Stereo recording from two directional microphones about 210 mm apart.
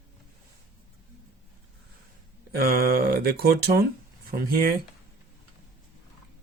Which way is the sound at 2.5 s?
45° right (ahead or behind).